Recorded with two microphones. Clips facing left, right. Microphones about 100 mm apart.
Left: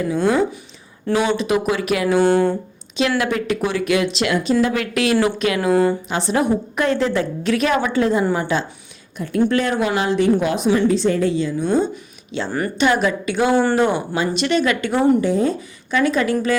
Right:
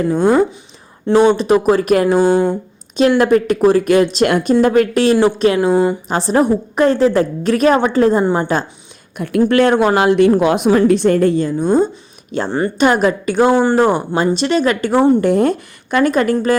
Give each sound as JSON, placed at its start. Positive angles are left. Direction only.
{"t": 0.1, "sound": "speech", "side_deg": -45}
{"t": 1.1, "sound": "a woman's voice", "side_deg": -20}
{"t": 1.4, "sound": "a woman's voice", "side_deg": -35}
{"t": 2.2, "sound": "speech", "side_deg": -15}
{"t": 3.2, "sound": "speech", "side_deg": -40}
{"t": 4.6, "sound": "a woman's voice", "side_deg": -45}
{"t": 6.1, "sound": "a woman's voice", "side_deg": -40}
{"t": 9.1, "sound": "speech", "side_deg": -60}
{"t": 12.5, "sound": "a woman's voice", "side_deg": -25}
{"t": 12.7, "sound": "speech", "side_deg": -45}
{"t": 13.5, "sound": "speech", "side_deg": -15}
{"t": 13.7, "sound": "a woman's voice", "side_deg": -35}
{"t": 14.9, "sound": "a woman's voice", "side_deg": -25}
{"t": 15.2, "sound": "speech", "side_deg": -65}